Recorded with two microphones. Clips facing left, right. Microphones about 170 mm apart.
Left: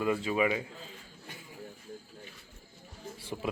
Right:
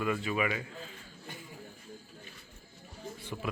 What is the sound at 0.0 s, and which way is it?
Speech, 25° left (ahead or behind).